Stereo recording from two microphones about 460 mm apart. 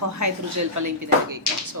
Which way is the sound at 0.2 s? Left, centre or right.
Right.